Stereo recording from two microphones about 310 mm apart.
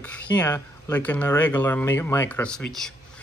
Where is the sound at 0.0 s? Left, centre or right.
Centre.